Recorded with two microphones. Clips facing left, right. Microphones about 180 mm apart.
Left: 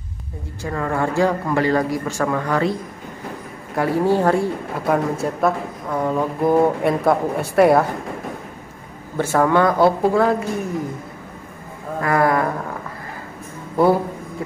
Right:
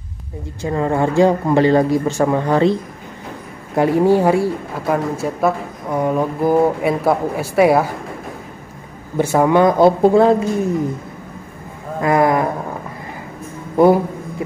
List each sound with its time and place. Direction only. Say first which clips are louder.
0.6 s speech: right 5 dB; 20° right (ahead or behind)
3.7 s speech: right 4 dB; 15° right (ahead or behind)
5.9 s speech: right 3 dB; 15° right (ahead or behind)
9.1 s speech: right 3 dB; 15° right (ahead or behind)
12.0 s speech: right 3 dB; 20° right (ahead or behind)